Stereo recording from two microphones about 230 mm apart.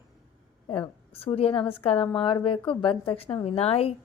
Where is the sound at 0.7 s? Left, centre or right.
Left.